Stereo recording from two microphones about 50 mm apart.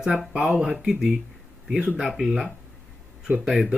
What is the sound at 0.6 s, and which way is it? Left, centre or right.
Speech, centre.